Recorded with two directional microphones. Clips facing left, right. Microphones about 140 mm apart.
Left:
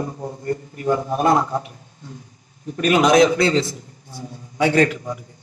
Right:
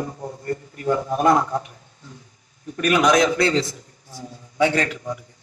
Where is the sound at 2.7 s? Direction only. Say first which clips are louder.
Left 3 dB; 30° left (ahead or behind).